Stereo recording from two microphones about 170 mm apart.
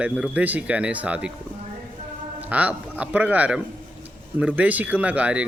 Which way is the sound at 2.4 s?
10° right (ahead or behind).